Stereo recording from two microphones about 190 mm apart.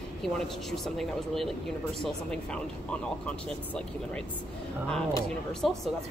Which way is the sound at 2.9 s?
5° left (ahead or behind).